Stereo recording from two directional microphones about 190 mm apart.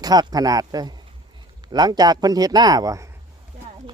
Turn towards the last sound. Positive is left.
turn(degrees=-20)  # may be behind; listen again after turning